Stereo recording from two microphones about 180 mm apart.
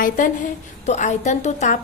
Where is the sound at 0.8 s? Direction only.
40° left (ahead or behind).